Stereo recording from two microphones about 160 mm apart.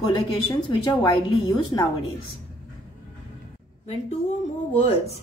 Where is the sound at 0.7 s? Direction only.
30° left (ahead or behind).